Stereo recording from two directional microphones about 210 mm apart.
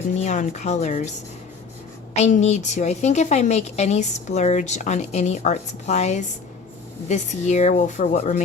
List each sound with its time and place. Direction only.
0.2 s a woman's voice: 35° left (ahead or behind)
2.1 s a woman's voice: 30° left (ahead or behind)